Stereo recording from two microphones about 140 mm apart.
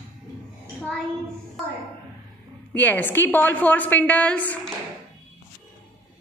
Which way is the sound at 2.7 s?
15° left (ahead or behind).